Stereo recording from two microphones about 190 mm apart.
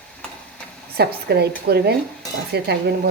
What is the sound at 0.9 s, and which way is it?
Speech, 60° right (ahead or behind).